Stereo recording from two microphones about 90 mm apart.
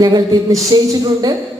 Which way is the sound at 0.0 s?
45° right (ahead or behind).